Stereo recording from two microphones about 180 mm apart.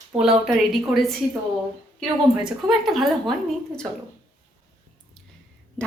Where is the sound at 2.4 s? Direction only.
Centre (ahead or behind).